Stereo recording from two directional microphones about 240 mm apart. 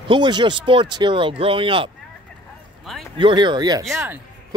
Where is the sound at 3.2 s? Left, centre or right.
Centre.